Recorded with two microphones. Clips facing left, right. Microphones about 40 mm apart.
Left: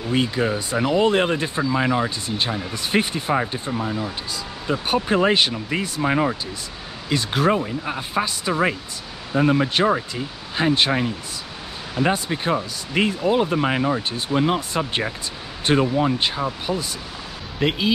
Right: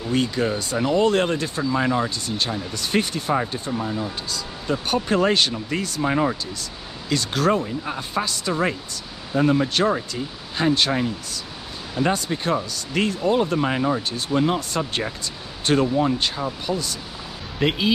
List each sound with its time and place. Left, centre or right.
0.1 s speech: centre
17.6 s speech: centre